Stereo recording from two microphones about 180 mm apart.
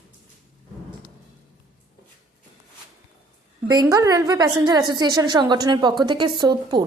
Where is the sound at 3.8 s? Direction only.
15° right (ahead or behind).